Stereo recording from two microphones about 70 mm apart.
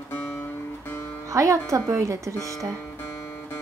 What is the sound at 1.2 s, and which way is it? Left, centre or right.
Music, right.